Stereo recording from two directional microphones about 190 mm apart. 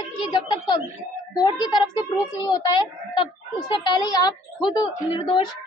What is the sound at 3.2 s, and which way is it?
Chicken, 20° left (ahead or behind).